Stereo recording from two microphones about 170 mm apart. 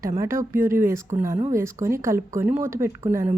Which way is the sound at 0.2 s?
15° right (ahead or behind).